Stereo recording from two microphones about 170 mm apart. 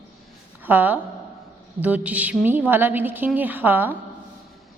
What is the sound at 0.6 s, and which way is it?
A woman's voice, 10° right (ahead or behind).